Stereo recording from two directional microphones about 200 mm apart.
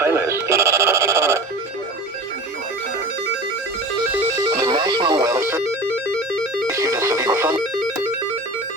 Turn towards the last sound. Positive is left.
turn(degrees=-10)  # may be behind; listen again after turning